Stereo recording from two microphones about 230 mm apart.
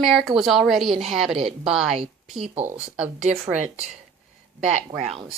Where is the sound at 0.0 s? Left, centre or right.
Centre.